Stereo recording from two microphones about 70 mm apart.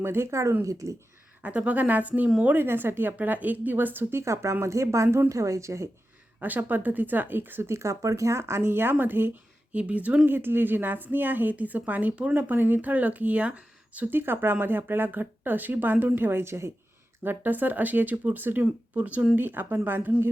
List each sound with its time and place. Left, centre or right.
0.0 s speech: right
1.4 s a woman's voice: centre
4.2 s speech: right
6.4 s speech: right
9.7 s a woman's voice: centre
10.2 s a woman's voice: right
17.2 s a woman's voice: right